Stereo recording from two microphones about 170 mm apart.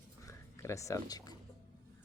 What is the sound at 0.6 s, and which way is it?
Speech, 20° left (ahead or behind).